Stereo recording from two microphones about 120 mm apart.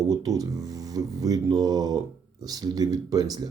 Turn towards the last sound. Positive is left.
turn(degrees=-30)  # may be behind; listen again after turning